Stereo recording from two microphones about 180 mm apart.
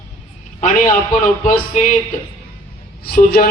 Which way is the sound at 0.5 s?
40° left (ahead or behind).